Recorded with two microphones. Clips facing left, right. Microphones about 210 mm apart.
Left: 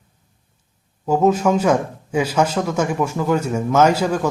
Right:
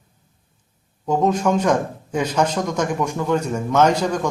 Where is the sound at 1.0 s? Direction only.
5° left (ahead or behind).